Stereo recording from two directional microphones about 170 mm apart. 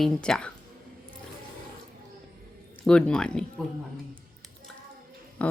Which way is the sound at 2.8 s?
5° left (ahead or behind).